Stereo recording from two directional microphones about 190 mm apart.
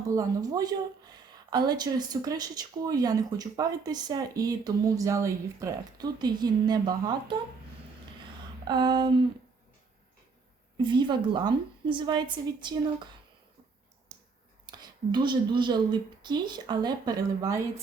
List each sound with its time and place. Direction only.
0.1 s speech: 20° right (ahead or behind)
8.6 s speech: 20° right (ahead or behind)
10.8 s speech: 25° right (ahead or behind)
14.7 s speech: 20° right (ahead or behind)